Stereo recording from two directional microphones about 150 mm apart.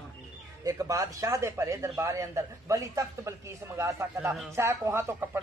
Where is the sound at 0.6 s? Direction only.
25° right (ahead or behind).